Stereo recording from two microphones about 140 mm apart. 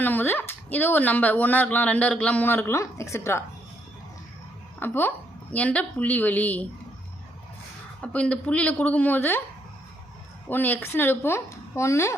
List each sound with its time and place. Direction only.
0.0 s speech: 15° left (ahead or behind)
4.8 s speech: 15° left (ahead or behind)
8.0 s speech: 10° left (ahead or behind)
10.5 s speech: 15° left (ahead or behind)